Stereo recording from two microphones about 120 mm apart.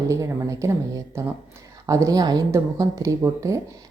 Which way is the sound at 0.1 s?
25° right (ahead or behind).